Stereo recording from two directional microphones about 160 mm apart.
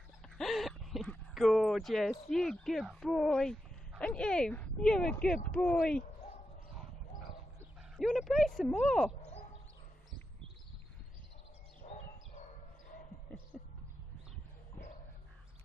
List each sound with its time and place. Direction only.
0.4 s speech: centre (ahead or behind)
8.0 s speech: centre (ahead or behind)
11.8 s dog: 45° left (ahead or behind)
13.5 s a sound: 5° left (ahead or behind)